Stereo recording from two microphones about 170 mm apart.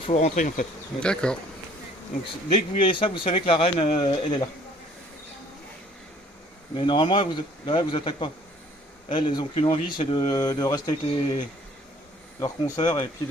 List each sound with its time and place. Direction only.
0.0 s bee: 40° left (ahead or behind)
0.9 s speech: 5° left (ahead or behind)
2.2 s speech: 30° left (ahead or behind)
6.7 s speech: 30° left (ahead or behind)